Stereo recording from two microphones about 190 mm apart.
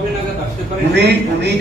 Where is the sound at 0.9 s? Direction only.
65° right (ahead or behind).